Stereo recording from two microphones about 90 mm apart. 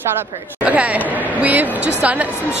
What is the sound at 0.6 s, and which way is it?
A woman's voice, 15° right (ahead or behind).